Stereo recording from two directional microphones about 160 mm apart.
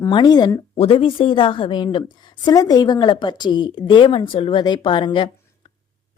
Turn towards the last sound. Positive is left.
turn(degrees=30)  # may be behind; listen again after turning